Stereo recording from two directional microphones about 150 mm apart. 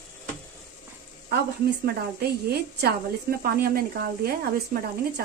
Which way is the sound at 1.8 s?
90° right.